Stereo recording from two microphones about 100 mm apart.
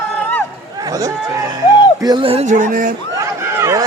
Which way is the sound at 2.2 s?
75° right (ahead or behind).